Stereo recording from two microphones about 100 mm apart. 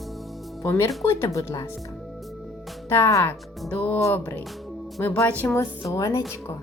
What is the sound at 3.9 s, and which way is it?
A woman's voice, 30° left (ahead or behind).